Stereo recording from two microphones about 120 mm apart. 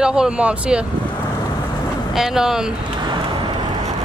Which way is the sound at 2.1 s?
5° right (ahead or behind).